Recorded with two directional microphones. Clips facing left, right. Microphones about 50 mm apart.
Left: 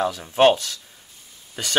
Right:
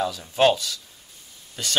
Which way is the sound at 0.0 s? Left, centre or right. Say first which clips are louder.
Left 3 dB; left.